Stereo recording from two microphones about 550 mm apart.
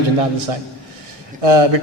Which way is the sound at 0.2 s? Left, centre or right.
Right.